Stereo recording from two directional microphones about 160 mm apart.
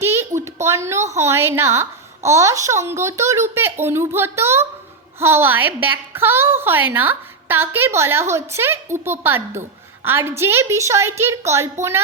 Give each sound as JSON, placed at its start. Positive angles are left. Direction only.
{"t": 0.0, "sound": "a child's voice", "side_deg": -15}